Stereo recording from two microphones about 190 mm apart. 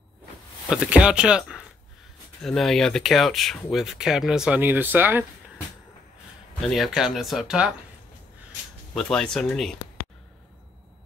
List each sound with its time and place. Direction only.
0.7 s speech: 5° right (ahead or behind)
6.6 s speech: centre (ahead or behind)
8.9 s speech: 5° left (ahead or behind)